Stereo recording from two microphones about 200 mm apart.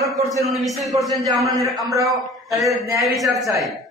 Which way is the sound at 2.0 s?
Centre (ahead or behind).